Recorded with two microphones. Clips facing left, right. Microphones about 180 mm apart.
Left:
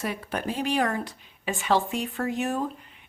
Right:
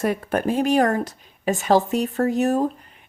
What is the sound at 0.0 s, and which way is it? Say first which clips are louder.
A woman's voice: right 8 dB; 50° right (ahead or behind).